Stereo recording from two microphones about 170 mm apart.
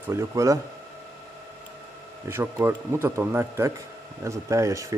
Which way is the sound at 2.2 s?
15° right (ahead or behind).